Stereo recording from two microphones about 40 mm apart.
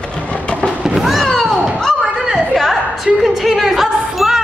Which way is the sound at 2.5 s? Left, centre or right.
Centre.